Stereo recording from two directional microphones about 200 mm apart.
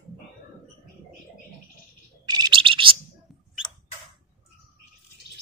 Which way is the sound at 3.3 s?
Centre (ahead or behind).